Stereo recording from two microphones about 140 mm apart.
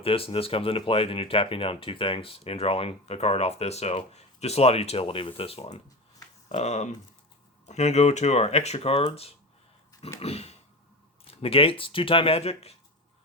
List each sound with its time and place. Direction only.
0.0 s speech: 40° left (ahead or behind)
10.2 s speech: 45° left (ahead or behind)